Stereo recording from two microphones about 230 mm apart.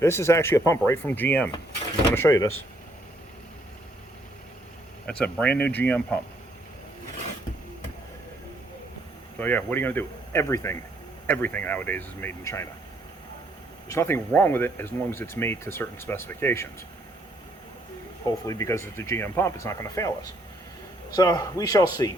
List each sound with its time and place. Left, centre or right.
0.0 s speech: centre
5.0 s speech: centre
9.4 s speech: centre
13.8 s speech: centre
18.3 s speech: centre